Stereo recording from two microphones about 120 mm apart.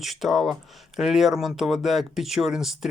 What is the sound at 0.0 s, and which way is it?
Speech, centre (ahead or behind).